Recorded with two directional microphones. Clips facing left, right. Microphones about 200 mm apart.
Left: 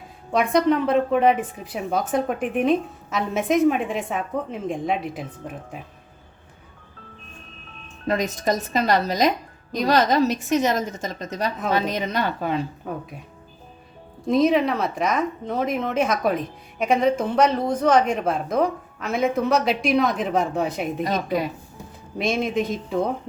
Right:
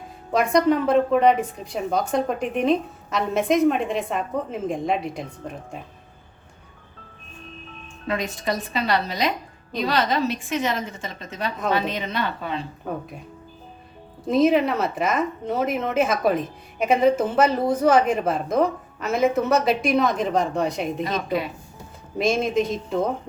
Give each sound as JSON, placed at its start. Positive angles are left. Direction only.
{"t": 0.3, "sound": "a woman's voice", "side_deg": 0}
{"t": 8.0, "sound": "a woman's voice", "side_deg": 40}
{"t": 12.9, "sound": "a woman's voice", "side_deg": 0}
{"t": 14.3, "sound": "a woman's voice", "side_deg": 0}
{"t": 22.2, "sound": "a woman's voice", "side_deg": 0}